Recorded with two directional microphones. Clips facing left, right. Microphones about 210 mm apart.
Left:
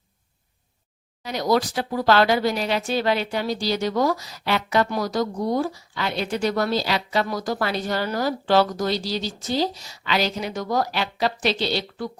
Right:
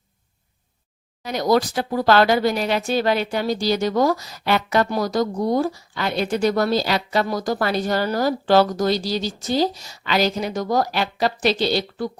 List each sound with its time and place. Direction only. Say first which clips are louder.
1.2 s speech: right 3 dB; 45° right (ahead or behind)